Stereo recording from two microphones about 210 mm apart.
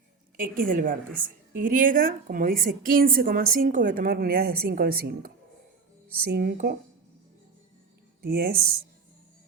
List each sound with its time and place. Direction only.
0.3 s a woman's voice: 40° right (ahead or behind)
6.3 s speech: 50° right (ahead or behind)
8.2 s speech: 45° right (ahead or behind)